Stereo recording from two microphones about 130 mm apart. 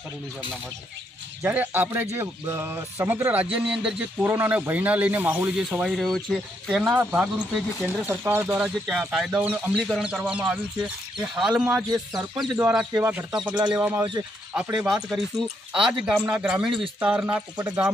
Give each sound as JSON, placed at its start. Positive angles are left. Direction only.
{"t": 1.4, "sound": "a man's voice", "side_deg": -15}
{"t": 5.7, "sound": "a man's voice", "side_deg": 0}
{"t": 8.6, "sound": "speech", "side_deg": -5}
{"t": 13.0, "sound": "a man's voice", "side_deg": -5}